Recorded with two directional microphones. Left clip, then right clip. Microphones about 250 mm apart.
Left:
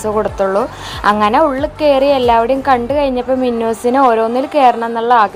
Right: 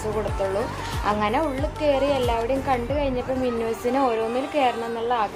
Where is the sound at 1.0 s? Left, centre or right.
Left.